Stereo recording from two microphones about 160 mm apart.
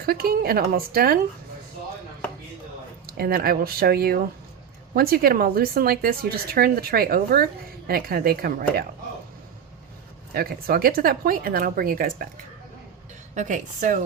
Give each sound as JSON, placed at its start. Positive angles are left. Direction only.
{"t": 0.0, "sound": "speech", "side_deg": -70}
{"t": 3.1, "sound": "speech", "side_deg": -70}
{"t": 10.3, "sound": "speech", "side_deg": -70}
{"t": 13.3, "sound": "speech", "side_deg": -50}